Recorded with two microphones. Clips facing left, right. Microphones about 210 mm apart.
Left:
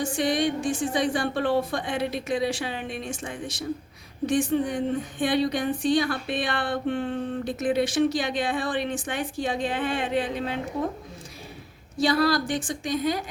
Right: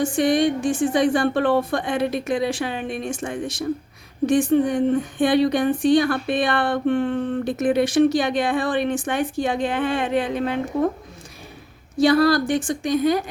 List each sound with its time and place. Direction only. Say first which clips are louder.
0.0 s a woman's voice: right 6 dB; 55° right (ahead or behind)
5.2 s a sound: right 6 dB; 55° right (ahead or behind)
12.0 s a woman's voice: right 6 dB; 50° right (ahead or behind)